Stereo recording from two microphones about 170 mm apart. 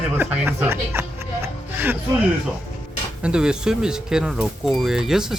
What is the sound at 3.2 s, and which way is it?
Speech, 5° right (ahead or behind).